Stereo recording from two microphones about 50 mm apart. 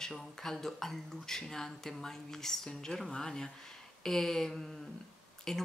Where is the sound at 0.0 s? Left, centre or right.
Centre.